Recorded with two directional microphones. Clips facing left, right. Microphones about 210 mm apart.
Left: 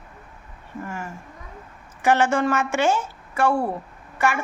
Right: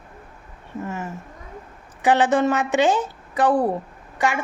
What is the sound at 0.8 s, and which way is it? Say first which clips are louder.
A woman's voice: right 3 dB; 20° right (ahead or behind).